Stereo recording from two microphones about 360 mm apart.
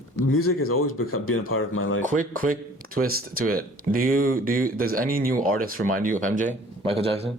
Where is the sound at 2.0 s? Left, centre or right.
Right.